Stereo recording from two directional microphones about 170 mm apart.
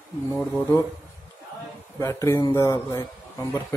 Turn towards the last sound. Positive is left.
turn(degrees=20)  # may be behind; listen again after turning